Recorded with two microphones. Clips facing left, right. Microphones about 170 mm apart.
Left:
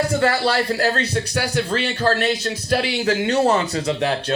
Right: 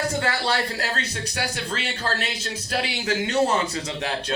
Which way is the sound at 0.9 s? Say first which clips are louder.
Left 7 dB; 35° left (ahead or behind).